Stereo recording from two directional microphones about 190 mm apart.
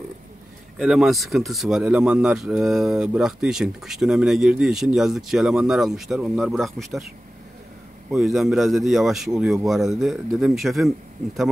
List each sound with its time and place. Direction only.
0.7 s speech: centre (ahead or behind)
8.1 s speech: centre (ahead or behind)